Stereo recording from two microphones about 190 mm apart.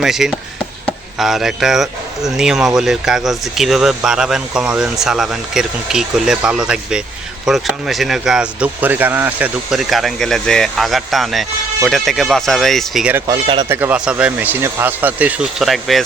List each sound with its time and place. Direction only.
0.0 s speech: centre (ahead or behind)
13.2 s speech: 25° right (ahead or behind)
13.7 s speech: 10° right (ahead or behind)